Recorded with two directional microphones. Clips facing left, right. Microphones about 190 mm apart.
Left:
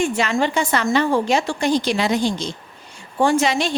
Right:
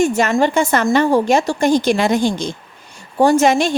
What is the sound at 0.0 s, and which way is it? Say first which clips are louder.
A woman's voice: right 5 dB; 45° right (ahead or behind).